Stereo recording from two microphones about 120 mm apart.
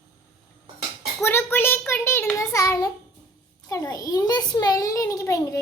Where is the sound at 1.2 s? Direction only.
20° left (ahead or behind).